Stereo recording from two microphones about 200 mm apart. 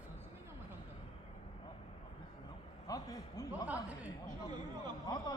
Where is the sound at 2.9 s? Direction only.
20° left (ahead or behind).